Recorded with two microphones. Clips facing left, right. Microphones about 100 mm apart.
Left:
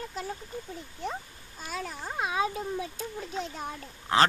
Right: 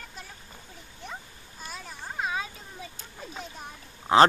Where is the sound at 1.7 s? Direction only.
75° left (ahead or behind).